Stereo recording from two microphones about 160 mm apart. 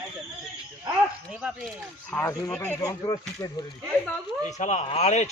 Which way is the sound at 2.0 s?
5° left (ahead or behind).